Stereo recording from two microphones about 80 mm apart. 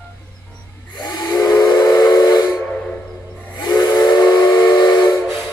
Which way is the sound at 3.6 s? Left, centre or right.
Left.